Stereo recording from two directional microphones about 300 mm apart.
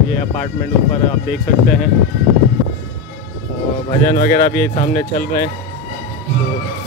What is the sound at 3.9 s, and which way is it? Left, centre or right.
Speech, left.